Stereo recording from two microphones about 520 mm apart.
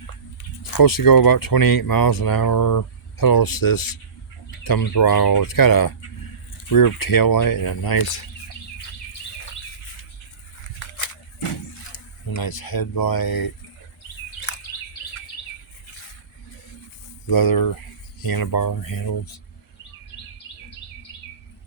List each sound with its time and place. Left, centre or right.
0.6 s speech: left
10.8 s a sound: left
11.9 s speech: left
17.2 s speech: left